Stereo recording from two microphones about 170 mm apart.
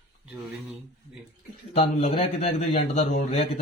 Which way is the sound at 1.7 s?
40° left (ahead or behind).